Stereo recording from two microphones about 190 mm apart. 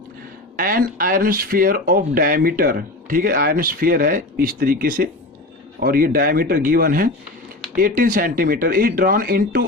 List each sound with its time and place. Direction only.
0.5 s speech: 50° right (ahead or behind)